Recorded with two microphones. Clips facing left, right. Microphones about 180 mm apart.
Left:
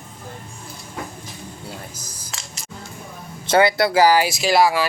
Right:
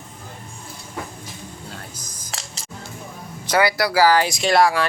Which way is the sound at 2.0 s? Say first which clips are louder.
Left 1 dB; 10° left (ahead or behind).